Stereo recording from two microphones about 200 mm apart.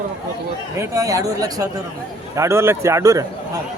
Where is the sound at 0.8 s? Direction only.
15° right (ahead or behind).